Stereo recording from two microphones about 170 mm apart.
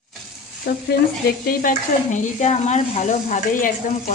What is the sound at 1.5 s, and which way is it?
Speech, 55° left (ahead or behind).